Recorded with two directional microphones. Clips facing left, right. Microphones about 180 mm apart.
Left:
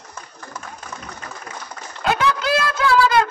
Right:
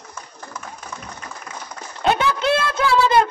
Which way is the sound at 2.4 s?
25° right (ahead or behind).